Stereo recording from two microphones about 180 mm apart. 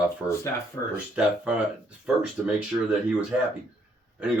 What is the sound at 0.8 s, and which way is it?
Speech, 20° left (ahead or behind).